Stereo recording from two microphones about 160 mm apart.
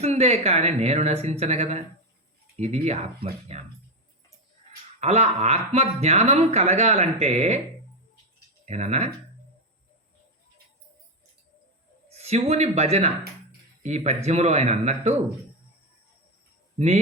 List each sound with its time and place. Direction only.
0.0 s speech: 45° right (ahead or behind)
4.9 s speech: 40° right (ahead or behind)
8.6 s speech: 45° right (ahead or behind)
12.1 s speech: 45° right (ahead or behind)
16.7 s speech: 45° right (ahead or behind)